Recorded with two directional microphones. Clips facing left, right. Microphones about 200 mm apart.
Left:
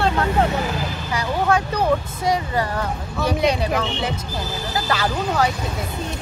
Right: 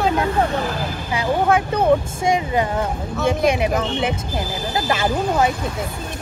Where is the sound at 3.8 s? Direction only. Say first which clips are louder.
Right 3 dB; 25° right (ahead or behind).